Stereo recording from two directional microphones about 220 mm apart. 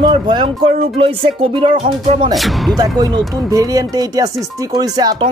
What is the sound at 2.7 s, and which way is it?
Speech, 20° right (ahead or behind).